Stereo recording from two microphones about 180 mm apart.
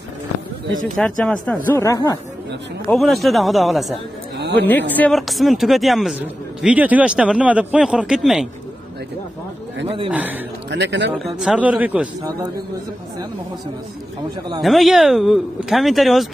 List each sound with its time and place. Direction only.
0.9 s speech: 5° left (ahead or behind)
1.7 s speech: 15° left (ahead or behind)
2.9 s speech: centre (ahead or behind)
4.4 s a sound: 70° right (ahead or behind)
4.6 s speech: 10° left (ahead or behind)
9.8 s a man's voice: 30° right (ahead or behind)
10.1 s a man's voice: 10° right (ahead or behind)
10.7 s speech: 75° right (ahead or behind)
11.1 s speech: centre (ahead or behind)
12.2 s a man's voice: 20° right (ahead or behind)
14.6 s speech: centre (ahead or behind)